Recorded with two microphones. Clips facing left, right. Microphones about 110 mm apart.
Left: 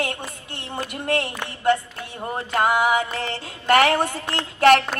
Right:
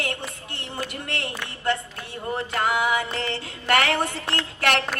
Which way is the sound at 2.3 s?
25° left (ahead or behind).